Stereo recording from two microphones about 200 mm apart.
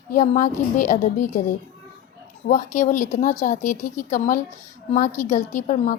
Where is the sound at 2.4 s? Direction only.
40° left (ahead or behind).